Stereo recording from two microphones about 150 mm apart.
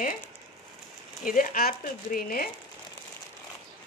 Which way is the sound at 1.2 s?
75° left (ahead or behind).